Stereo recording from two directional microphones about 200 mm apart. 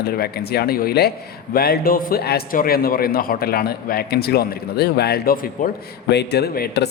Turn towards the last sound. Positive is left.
turn(degrees=55)  # may be behind; listen again after turning